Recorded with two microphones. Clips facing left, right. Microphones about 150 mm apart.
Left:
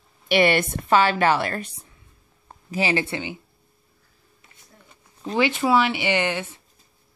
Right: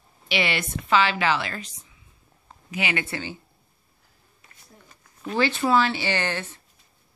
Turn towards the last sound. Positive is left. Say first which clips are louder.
# left 4 dB
turn(degrees=15)  # may be behind; listen again after turning